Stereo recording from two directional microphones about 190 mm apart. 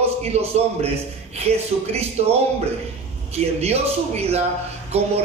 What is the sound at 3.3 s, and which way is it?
A man's voice, 35° right (ahead or behind).